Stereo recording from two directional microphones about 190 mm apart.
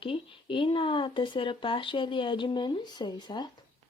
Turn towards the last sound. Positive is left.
turn(degrees=20)  # may be behind; listen again after turning